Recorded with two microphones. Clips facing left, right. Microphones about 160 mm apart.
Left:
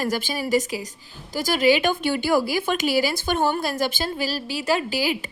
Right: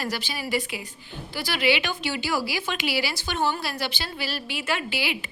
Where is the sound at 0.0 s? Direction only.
45° left (ahead or behind).